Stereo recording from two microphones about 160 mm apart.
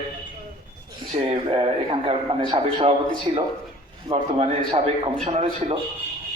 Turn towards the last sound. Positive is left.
turn(degrees=-35)  # may be behind; listen again after turning